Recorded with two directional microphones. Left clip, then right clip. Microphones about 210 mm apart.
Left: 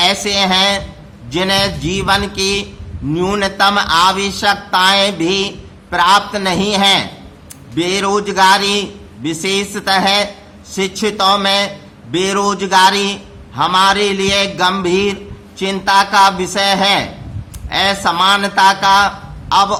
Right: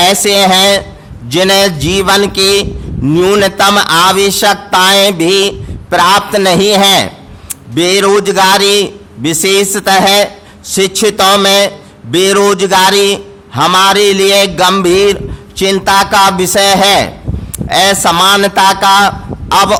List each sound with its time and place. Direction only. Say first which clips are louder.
0.0 s a man's voice: right 6 dB; 50° right (ahead or behind)